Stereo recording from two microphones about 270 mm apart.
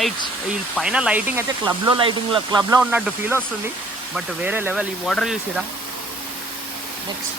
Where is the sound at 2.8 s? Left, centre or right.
Centre.